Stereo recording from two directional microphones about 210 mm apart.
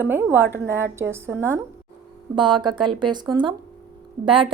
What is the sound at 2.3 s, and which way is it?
A woman's voice, 20° right (ahead or behind).